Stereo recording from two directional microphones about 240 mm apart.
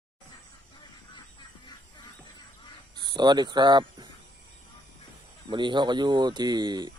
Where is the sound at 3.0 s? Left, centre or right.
Centre.